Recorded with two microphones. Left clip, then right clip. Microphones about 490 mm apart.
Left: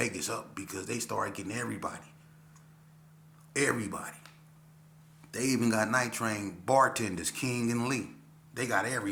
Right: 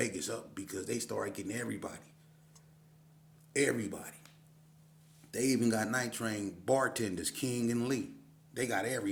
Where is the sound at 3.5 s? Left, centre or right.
Right.